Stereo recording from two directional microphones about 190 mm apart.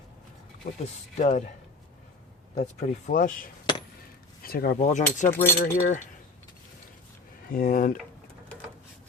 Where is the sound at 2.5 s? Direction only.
40° left (ahead or behind).